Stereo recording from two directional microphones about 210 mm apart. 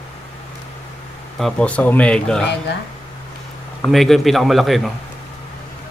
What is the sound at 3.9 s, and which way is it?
Speech, centre (ahead or behind).